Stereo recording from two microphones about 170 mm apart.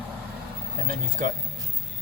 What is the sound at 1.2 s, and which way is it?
Speech, 50° right (ahead or behind).